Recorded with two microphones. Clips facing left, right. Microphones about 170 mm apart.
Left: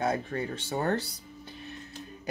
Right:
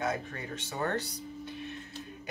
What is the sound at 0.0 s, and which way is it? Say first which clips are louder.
Speech: left 5 dB; 35° left (ahead or behind).